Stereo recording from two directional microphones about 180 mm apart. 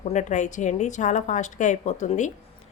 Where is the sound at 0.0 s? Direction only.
40° left (ahead or behind).